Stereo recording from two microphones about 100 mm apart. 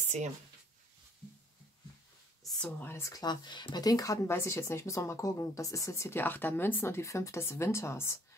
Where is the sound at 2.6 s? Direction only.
20° left (ahead or behind).